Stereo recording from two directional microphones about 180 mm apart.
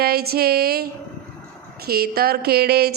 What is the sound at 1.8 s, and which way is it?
A woman's voice, 60° right (ahead or behind).